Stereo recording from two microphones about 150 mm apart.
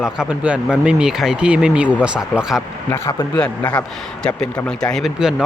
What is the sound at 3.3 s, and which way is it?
Speech, 10° left (ahead or behind).